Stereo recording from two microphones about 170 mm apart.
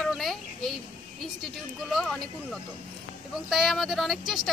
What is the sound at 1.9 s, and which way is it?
Speech, centre (ahead or behind).